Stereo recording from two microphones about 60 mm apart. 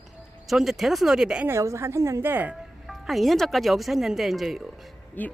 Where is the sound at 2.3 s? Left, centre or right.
Right.